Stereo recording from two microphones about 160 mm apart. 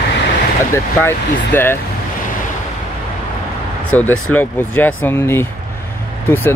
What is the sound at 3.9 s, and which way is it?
Speech, 10° left (ahead or behind).